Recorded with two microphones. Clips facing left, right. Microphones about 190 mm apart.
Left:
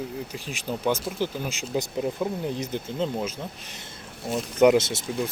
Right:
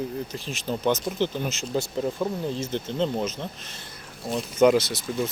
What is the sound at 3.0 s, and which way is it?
Speech, 5° left (ahead or behind).